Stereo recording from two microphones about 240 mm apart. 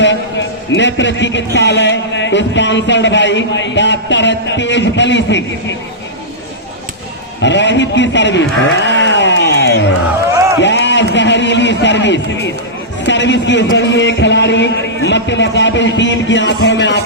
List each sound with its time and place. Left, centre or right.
0.0 s a man's voice: left
7.4 s a man's voice: left